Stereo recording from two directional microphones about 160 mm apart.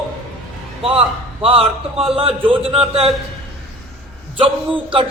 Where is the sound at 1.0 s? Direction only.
35° right (ahead or behind).